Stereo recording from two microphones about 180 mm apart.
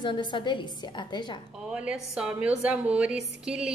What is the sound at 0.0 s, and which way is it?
A woman's voice, 25° left (ahead or behind).